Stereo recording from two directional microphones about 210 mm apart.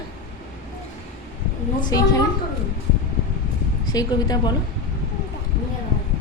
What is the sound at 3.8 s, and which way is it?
Speech, 20° left (ahead or behind).